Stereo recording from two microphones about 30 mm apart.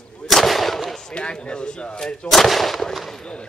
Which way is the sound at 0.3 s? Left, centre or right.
Centre.